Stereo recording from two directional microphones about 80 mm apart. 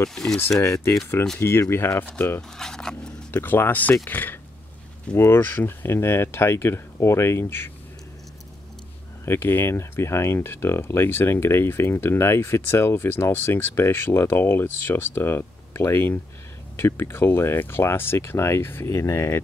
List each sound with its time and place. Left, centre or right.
0.1 s speech: centre
1.4 s speech: left
2.5 s speech: centre
3.3 s speech: left
9.2 s speech: left